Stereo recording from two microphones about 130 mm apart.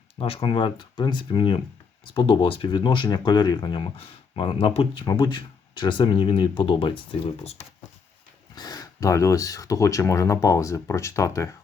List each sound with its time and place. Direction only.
0.2 s speech: 45° left (ahead or behind)
8.5 s speech: 30° left (ahead or behind)